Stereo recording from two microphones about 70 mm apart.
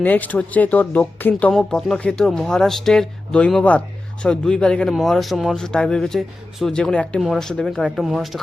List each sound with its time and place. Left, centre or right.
0.0 s speech: left
1.7 s speech: centre
4.9 s speech: centre
5.6 s speech: centre
7.2 s speech: centre